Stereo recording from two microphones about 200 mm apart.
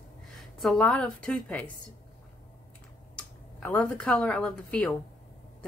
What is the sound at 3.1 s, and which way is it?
Speech, 5° left (ahead or behind).